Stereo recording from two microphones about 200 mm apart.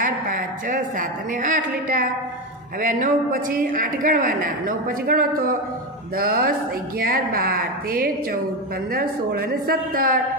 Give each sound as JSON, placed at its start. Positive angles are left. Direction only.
{"t": 0.0, "sound": "a woman's voice", "side_deg": -45}